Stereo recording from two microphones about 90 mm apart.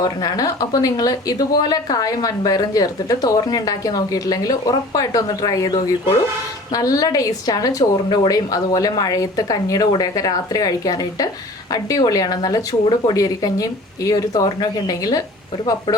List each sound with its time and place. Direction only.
0.0 s speech: 45° left (ahead or behind)